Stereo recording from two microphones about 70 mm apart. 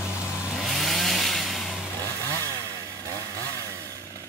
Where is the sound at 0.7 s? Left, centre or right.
Centre.